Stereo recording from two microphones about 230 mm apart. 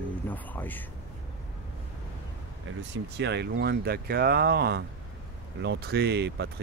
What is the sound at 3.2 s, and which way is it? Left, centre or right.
Speech, right.